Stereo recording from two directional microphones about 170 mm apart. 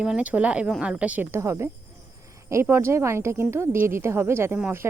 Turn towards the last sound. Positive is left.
turn(degrees=-15)  # may be behind; listen again after turning